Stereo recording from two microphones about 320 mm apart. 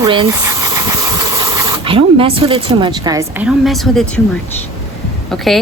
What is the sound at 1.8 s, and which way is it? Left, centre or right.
A woman's voice, centre.